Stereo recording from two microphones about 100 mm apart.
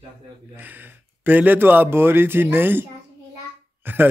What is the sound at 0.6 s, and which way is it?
Speech, 20° right (ahead or behind).